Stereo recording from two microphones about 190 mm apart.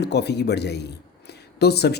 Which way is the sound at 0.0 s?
60° left (ahead or behind).